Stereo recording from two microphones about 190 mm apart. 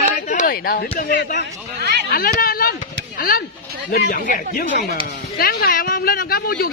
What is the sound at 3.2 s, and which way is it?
Speech, 50° left (ahead or behind).